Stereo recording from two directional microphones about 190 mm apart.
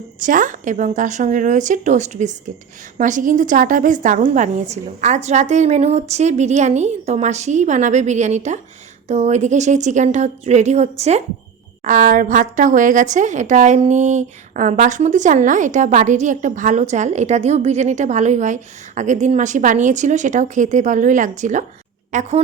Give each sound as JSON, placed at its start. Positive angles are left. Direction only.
{"t": 0.2, "sound": "a woman's voice", "side_deg": -45}